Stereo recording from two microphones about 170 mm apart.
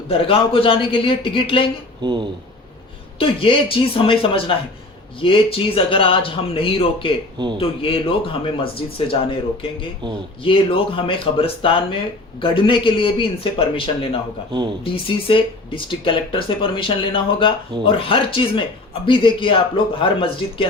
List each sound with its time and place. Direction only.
0.1 s speech: 35° left (ahead or behind)
2.0 s speech: 25° right (ahead or behind)
3.2 s speech: 30° left (ahead or behind)